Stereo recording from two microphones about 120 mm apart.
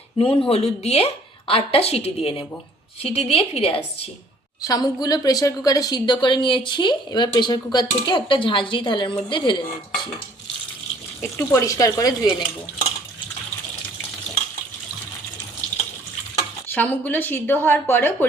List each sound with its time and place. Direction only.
0.2 s a woman's voice: 45° left (ahead or behind)
4.6 s a woman's voice: 35° left (ahead or behind)
11.2 s speech: 20° left (ahead or behind)
16.6 s a woman's voice: 15° left (ahead or behind)